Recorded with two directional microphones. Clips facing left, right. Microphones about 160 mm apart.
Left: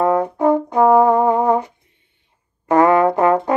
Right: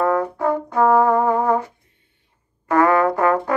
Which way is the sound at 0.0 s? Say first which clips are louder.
Left 3 dB; 20° left (ahead or behind).